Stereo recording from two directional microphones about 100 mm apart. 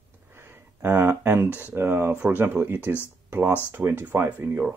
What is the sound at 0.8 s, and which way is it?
Speech, 20° right (ahead or behind).